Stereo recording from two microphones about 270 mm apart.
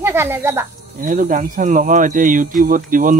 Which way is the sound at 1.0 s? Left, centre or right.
Right.